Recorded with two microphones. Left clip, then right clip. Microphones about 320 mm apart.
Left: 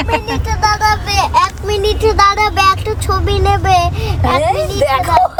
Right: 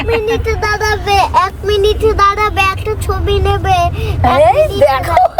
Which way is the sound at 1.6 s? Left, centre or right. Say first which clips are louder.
Right 2 dB; centre.